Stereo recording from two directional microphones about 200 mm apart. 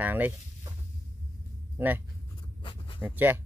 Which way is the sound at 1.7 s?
10° right (ahead or behind).